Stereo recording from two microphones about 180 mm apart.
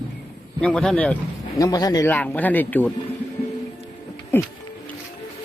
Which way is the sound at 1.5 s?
20° left (ahead or behind).